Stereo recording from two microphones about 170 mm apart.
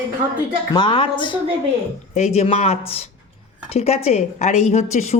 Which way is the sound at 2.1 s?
40° left (ahead or behind).